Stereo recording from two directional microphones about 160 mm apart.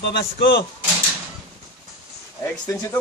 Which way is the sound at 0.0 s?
85° left.